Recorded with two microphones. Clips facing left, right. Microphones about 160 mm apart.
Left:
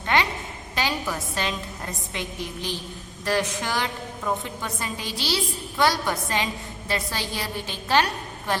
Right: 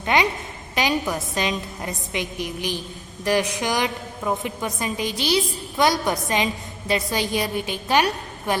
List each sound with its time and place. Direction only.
0.0 s a woman's voice: 15° right (ahead or behind)